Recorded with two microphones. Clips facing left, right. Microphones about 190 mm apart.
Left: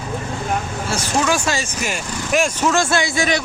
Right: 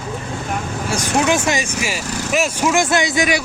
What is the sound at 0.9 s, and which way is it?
Speech, 15° right (ahead or behind).